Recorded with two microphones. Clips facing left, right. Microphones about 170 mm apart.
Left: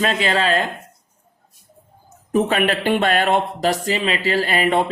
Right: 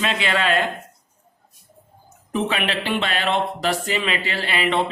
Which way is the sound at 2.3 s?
45° left (ahead or behind).